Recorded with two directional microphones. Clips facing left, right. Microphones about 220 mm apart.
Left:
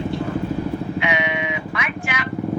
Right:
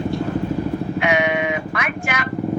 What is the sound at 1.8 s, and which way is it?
Vehicle, 45° right (ahead or behind).